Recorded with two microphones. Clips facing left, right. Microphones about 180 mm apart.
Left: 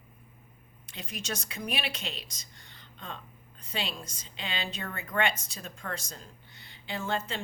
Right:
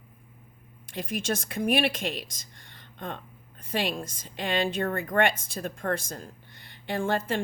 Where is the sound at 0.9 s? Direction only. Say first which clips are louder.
Right 8 dB; 50° right (ahead or behind).